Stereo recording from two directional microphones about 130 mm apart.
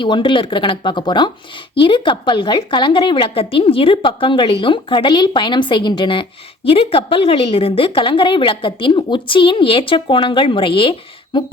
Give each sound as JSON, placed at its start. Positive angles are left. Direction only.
{"t": 0.0, "sound": "a woman's voice", "side_deg": 40}